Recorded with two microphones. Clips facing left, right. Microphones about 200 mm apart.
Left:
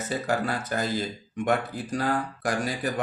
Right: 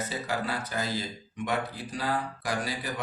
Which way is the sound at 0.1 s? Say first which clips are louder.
Left 5 dB; 50° left (ahead or behind).